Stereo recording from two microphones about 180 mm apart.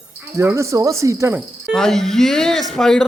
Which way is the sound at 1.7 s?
Centre (ahead or behind).